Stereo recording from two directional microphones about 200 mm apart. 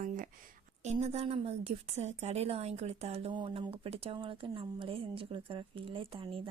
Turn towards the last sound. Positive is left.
turn(degrees=-25)  # may be behind; listen again after turning